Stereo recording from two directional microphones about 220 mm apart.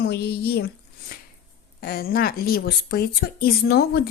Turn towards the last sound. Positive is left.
turn(degrees=45)  # may be behind; listen again after turning